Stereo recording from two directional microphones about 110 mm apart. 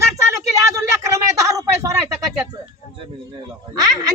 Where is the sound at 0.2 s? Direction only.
30° right (ahead or behind).